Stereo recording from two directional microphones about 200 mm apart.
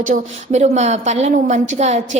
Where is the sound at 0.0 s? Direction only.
35° right (ahead or behind).